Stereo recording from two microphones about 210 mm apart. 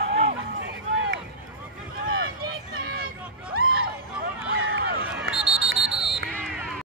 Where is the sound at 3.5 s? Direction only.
45° right (ahead or behind).